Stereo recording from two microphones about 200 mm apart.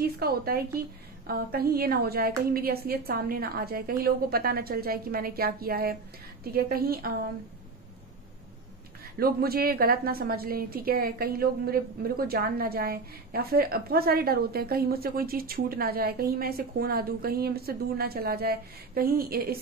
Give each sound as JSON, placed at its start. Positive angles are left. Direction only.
{"t": 0.0, "sound": "a woman's voice", "side_deg": -50}
{"t": 9.2, "sound": "a woman's voice", "side_deg": -50}